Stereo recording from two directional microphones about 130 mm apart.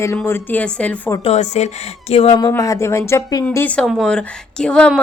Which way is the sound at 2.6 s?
25° left (ahead or behind).